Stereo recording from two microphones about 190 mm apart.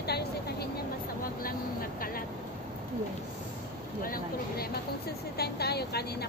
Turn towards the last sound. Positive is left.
turn(degrees=55)  # may be behind; listen again after turning